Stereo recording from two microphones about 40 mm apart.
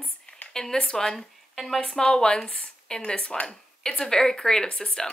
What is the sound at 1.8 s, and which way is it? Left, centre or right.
A woman's voice, centre.